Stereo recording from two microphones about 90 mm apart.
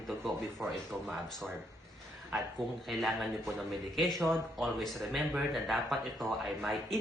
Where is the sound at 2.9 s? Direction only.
Centre (ahead or behind).